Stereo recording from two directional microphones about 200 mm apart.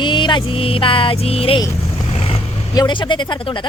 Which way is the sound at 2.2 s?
25° left (ahead or behind).